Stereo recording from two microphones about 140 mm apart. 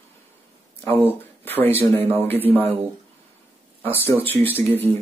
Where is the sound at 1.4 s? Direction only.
15° left (ahead or behind).